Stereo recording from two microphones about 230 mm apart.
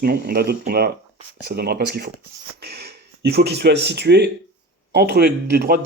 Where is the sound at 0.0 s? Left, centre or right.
Right.